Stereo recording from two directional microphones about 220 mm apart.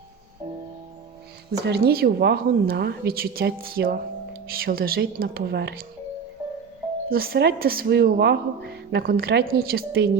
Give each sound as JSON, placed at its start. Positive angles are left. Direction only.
{"t": 1.5, "sound": "speech", "side_deg": -50}
{"t": 7.1, "sound": "speech", "side_deg": -45}